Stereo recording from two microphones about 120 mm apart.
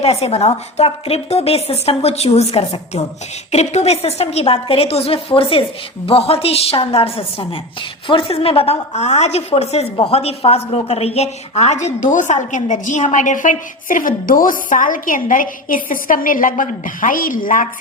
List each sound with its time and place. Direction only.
0.0 s a woman's voice: 60° left (ahead or behind); by 14.9 s 90° left
16.1 s a woman's voice: 90° left